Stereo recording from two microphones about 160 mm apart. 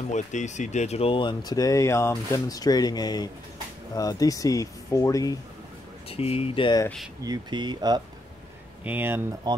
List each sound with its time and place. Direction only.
0.1 s speech: 50° left (ahead or behind); by 5.3 s 20° left (ahead or behind)
6.0 s speech: 35° left (ahead or behind)
7.2 s speech: 25° right (ahead or behind)
8.8 s speech: 10° right (ahead or behind)
9.5 s speech: 25° right (ahead or behind)